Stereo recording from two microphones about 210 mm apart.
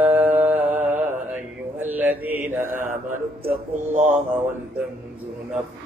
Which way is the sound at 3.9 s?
35° right (ahead or behind).